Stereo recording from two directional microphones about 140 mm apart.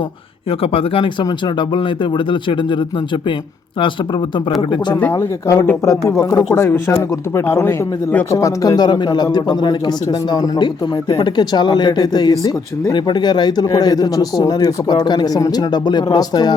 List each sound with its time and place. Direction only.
0.6 s speech: 40° left (ahead or behind)
4.9 s speech: 15° left (ahead or behind)